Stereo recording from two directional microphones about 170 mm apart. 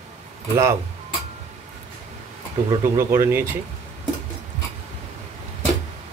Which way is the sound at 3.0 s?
15° right (ahead or behind).